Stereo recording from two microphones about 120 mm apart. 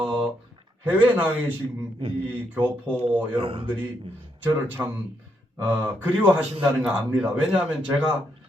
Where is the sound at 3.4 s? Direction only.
50° right (ahead or behind).